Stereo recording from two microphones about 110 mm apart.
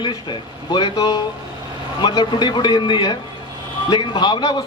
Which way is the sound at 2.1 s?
45° left (ahead or behind).